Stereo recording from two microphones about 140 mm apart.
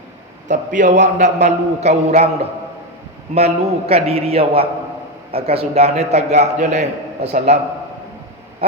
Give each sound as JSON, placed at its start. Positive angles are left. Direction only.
{"t": 0.4, "sound": "a man's voice", "side_deg": -60}